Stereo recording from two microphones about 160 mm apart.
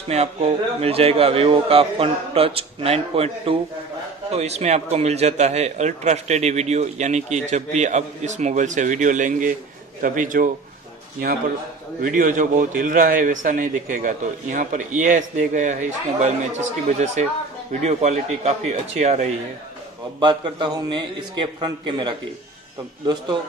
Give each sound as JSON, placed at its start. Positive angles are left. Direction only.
{"t": 0.1, "sound": "a man's voice", "side_deg": -40}
{"t": 12.0, "sound": "a man's voice", "side_deg": -55}
{"t": 20.2, "sound": "a man's voice", "side_deg": -30}